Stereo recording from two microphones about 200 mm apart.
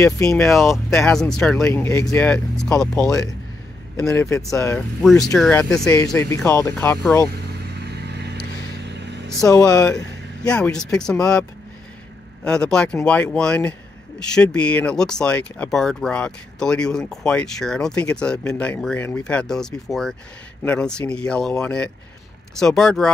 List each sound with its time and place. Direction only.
0.4 s speech: centre (ahead or behind)
1.7 s speech: 15° left (ahead or behind)
4.1 s speech: 15° left (ahead or behind)
5.0 s speech: centre (ahead or behind)
7.8 s vehicle: 55° right (ahead or behind)
9.5 s speech: 15° left (ahead or behind)
10.4 s speech: 5° left (ahead or behind)
12.4 s speech: 5° left (ahead or behind)